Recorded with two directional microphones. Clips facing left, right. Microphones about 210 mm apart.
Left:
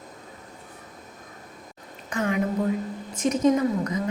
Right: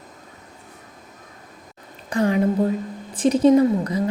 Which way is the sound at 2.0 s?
35° right (ahead or behind).